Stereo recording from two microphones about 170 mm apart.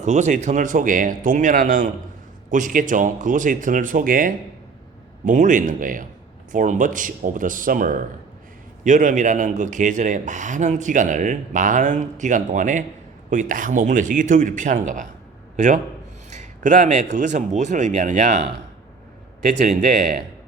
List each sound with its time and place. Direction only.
0.0 s a man's voice: 45° right (ahead or behind)
16.3 s a sound: 45° right (ahead or behind)
17.2 s a man's voice: 45° right (ahead or behind)
19.5 s speech: 55° right (ahead or behind)